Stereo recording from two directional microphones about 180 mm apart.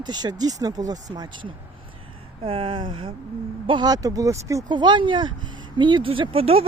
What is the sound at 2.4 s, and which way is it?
Speech, 30° right (ahead or behind).